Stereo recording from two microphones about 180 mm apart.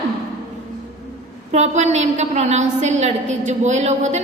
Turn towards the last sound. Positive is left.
turn(degrees=-40)  # may be behind; listen again after turning